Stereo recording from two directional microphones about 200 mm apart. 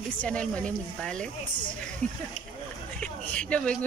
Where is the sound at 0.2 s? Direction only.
5° left (ahead or behind).